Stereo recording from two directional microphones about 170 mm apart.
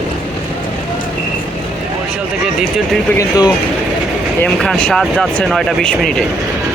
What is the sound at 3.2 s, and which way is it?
Speech, 20° left (ahead or behind).